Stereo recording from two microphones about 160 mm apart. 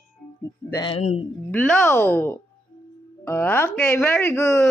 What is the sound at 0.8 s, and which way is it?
Speech, 35° left (ahead or behind).